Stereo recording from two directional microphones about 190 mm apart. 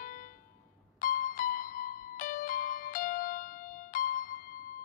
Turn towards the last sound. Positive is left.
turn(degrees=45)  # may be behind; listen again after turning